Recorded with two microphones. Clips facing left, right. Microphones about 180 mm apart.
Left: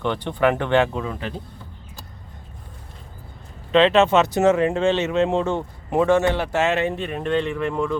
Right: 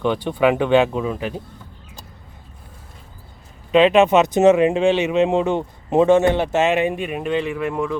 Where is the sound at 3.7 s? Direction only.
15° right (ahead or behind).